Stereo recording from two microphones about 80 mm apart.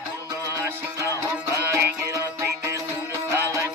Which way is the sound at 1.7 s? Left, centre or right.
Right.